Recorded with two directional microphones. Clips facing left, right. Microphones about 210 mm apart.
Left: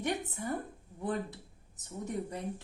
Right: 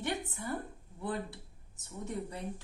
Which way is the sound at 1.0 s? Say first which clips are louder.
Left 2 dB; 20° left (ahead or behind).